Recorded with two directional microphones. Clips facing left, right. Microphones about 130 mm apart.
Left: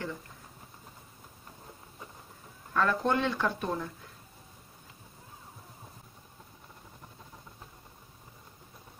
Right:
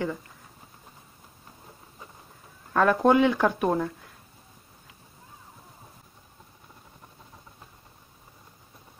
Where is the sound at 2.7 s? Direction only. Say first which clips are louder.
Right 8 dB; 90° right.